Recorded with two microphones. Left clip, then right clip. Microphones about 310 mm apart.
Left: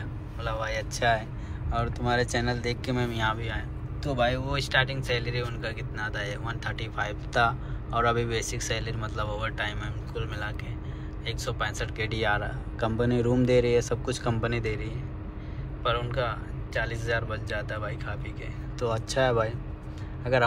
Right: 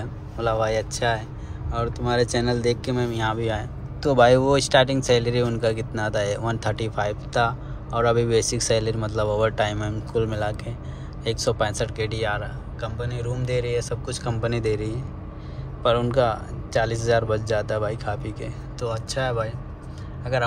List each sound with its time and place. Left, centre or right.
0.4 s speech: centre